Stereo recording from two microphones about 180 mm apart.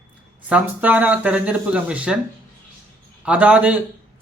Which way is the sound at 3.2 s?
5° right (ahead or behind).